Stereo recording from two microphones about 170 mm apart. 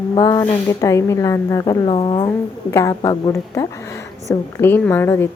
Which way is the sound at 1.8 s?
30° left (ahead or behind).